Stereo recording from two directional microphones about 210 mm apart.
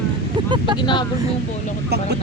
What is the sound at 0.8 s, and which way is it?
Speech, 20° left (ahead or behind).